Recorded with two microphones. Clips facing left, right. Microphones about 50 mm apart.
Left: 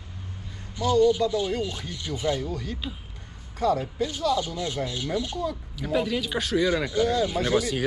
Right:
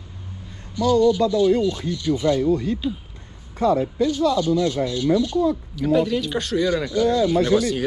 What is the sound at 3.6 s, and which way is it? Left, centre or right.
Speech, right.